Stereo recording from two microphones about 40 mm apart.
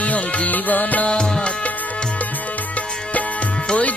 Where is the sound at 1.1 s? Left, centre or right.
Left.